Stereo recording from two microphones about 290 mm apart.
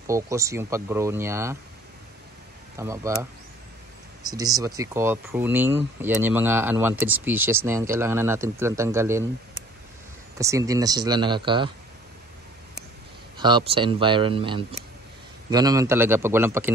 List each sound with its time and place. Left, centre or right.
0.0 s speech: centre
2.8 s speech: centre
10.3 s speech: centre
13.4 s speech: centre